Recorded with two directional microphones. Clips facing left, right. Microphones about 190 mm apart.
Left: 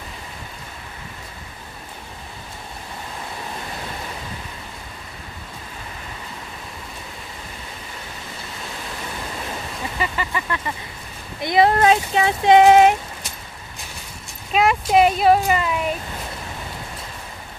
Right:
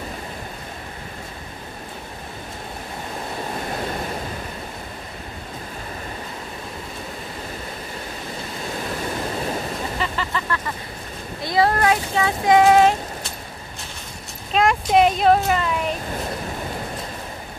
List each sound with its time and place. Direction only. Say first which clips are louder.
9.9 s vehicle: left 4 dB; 10° left (ahead or behind)
11.4 s speech: left 3 dB; 20° left (ahead or behind)
14.5 s speech: left 1 dB; 5° left (ahead or behind)